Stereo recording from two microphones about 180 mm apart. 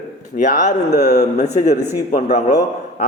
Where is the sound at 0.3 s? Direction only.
45° left (ahead or behind).